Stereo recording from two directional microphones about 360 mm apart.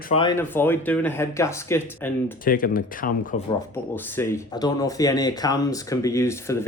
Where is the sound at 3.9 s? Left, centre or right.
Centre.